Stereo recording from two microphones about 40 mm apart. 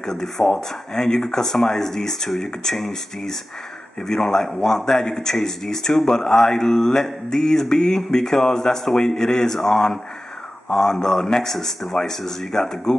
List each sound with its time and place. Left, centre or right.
0.0 s speech: centre